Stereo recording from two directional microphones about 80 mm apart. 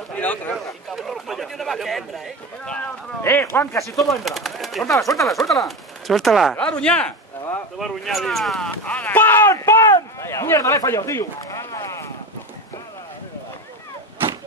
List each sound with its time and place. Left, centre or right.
0.1 s a sound: centre
0.8 s a sound: centre
2.6 s speech: centre
3.2 s speech: left
3.7 s speech: left
4.1 s speech: centre
6.5 s speech: centre
7.8 s speech: centre; by 9.8 s left
9.8 s a sound: left